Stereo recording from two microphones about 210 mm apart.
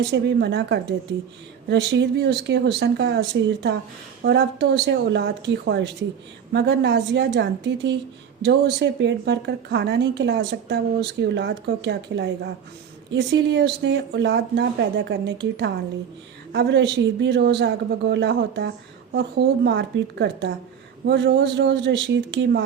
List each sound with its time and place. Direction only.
0.1 s a woman's voice: 55° right (ahead or behind)